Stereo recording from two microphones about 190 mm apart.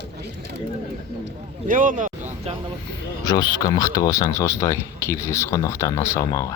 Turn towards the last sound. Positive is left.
turn(degrees=20)  # may be behind; listen again after turning